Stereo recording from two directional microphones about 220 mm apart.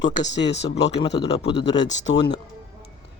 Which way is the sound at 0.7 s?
25° left (ahead or behind).